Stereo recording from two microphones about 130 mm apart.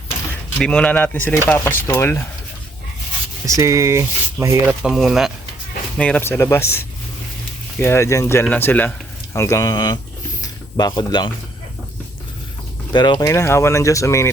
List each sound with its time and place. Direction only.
0.6 s speech: 5° left (ahead or behind)
3.4 s speech: 25° right (ahead or behind)
4.6 s speech: 5° right (ahead or behind)
6.0 s speech: 10° left (ahead or behind); by 11.3 s 35° left (ahead or behind)
12.9 s speech: 35° left (ahead or behind)